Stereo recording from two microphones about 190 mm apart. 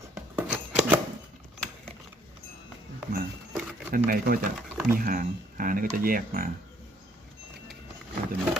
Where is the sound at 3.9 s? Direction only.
50° right (ahead or behind).